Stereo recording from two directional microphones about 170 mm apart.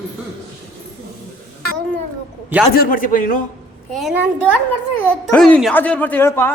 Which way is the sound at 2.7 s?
55° left (ahead or behind).